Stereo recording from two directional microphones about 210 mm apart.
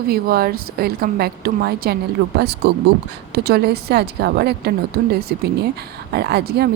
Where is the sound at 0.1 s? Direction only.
45° right (ahead or behind).